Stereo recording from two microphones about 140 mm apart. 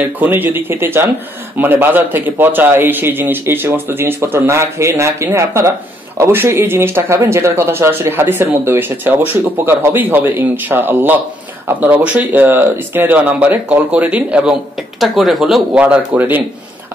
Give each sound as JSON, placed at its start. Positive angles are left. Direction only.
{"t": 0.0, "sound": "speech", "side_deg": -15}